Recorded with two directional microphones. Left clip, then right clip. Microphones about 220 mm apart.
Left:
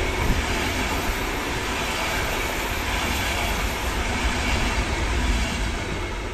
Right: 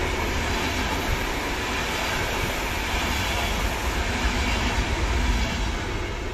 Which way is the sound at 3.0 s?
45° left (ahead or behind).